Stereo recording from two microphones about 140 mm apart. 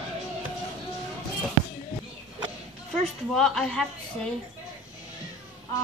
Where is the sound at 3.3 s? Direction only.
5° left (ahead or behind).